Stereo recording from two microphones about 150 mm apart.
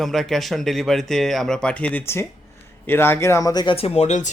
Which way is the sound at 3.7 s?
45° left (ahead or behind).